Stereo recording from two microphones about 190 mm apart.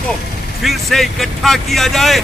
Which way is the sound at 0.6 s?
Centre (ahead or behind).